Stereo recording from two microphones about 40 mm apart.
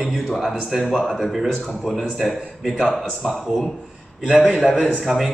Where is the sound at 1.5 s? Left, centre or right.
Centre.